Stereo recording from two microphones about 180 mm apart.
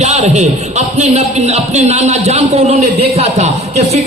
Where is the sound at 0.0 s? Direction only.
40° right (ahead or behind).